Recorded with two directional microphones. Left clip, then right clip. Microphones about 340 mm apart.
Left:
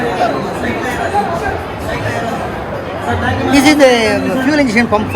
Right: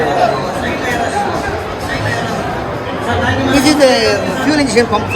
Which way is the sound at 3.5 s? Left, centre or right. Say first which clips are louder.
Left 2 dB; centre.